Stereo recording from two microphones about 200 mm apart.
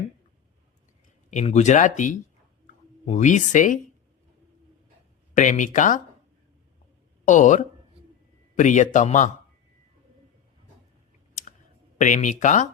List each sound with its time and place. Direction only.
1.3 s speech: 35° left (ahead or behind)
5.3 s speech: 40° left (ahead or behind)
7.3 s speech: 40° left (ahead or behind)
11.9 s speech: 35° left (ahead or behind)